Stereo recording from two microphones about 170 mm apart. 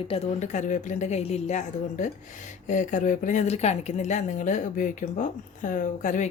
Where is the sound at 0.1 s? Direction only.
45° left (ahead or behind).